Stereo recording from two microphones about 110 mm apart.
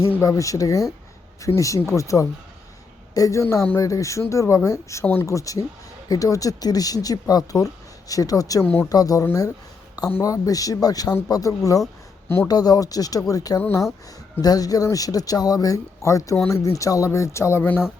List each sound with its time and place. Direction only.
0.2 s speech: 30° left (ahead or behind)
8.6 s speech: 15° left (ahead or behind)
8.9 s speech: 35° left (ahead or behind)
13.6 s speech: 20° left (ahead or behind)
14.4 s speech: 35° left (ahead or behind)
17.6 s speech: 15° left (ahead or behind)